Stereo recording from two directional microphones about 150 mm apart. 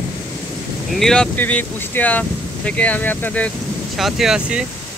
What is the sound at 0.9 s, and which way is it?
Speech, 5° left (ahead or behind).